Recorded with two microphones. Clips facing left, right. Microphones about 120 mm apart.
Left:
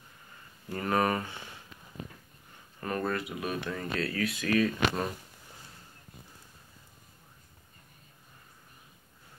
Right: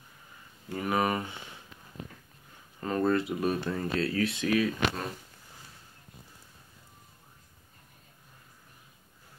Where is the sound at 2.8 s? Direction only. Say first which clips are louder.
Right 5 dB; 25° right (ahead or behind).